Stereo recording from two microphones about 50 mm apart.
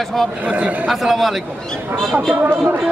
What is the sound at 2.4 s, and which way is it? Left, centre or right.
Speech, right.